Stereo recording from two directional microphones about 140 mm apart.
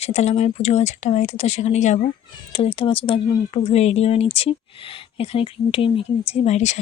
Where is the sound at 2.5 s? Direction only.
45° left (ahead or behind).